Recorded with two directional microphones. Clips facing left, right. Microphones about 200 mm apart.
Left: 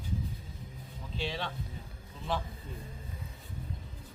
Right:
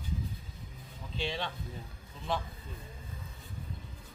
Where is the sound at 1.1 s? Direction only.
5° left (ahead or behind).